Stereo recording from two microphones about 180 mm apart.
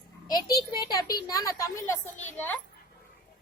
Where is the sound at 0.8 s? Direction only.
20° left (ahead or behind).